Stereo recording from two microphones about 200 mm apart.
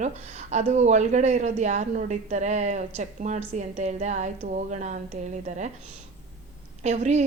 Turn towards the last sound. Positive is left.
turn(degrees=-35)  # may be behind; listen again after turning